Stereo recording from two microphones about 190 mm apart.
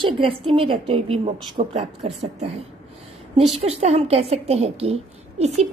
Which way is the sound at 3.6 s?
35° right (ahead or behind).